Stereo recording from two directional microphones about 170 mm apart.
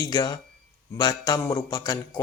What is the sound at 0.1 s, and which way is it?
Speech, 25° left (ahead or behind).